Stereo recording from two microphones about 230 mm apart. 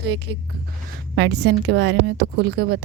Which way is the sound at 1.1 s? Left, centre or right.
Right.